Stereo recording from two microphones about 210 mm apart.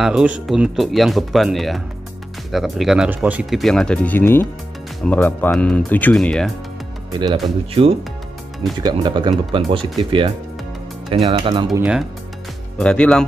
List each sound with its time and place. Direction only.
0.0 s speech: 5° right (ahead or behind)
7.1 s speech: 20° right (ahead or behind)
8.7 s speech: 20° right (ahead or behind)
11.8 s speech: 5° right (ahead or behind)